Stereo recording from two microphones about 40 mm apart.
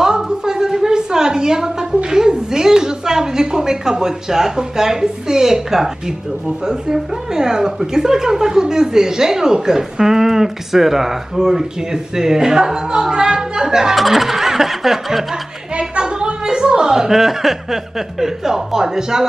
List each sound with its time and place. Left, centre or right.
0.0 s a sound: centre
2.0 s a woman's voice: centre
13.9 s a woman's voice: centre
15.8 s a woman's voice: centre